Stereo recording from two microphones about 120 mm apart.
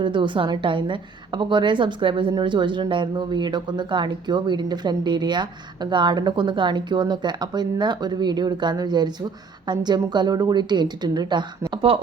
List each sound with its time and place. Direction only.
0.0 s a woman's voice: 40° right (ahead or behind)